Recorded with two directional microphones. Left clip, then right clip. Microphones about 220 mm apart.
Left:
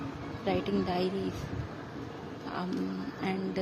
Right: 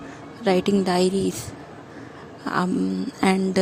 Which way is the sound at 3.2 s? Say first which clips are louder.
Right 14 dB; 55° right (ahead or behind).